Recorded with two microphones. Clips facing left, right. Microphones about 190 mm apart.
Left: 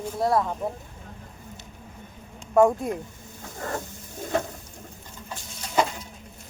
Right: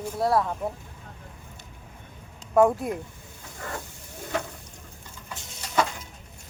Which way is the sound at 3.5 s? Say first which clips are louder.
Left 4 dB; 40° left (ahead or behind).